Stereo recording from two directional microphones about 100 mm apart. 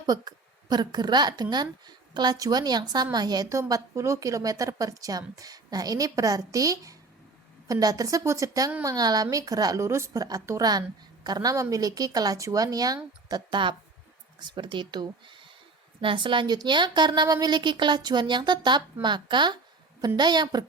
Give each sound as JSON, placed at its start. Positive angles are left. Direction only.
{"t": 0.0, "sound": "a woman's voice", "side_deg": -45}
{"t": 3.6, "sound": "a woman's voice", "side_deg": -30}